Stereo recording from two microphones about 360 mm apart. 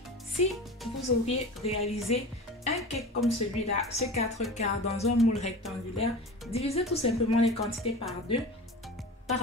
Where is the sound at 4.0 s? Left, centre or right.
Centre.